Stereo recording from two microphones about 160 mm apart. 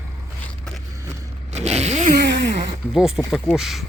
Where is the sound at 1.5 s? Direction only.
45° right (ahead or behind).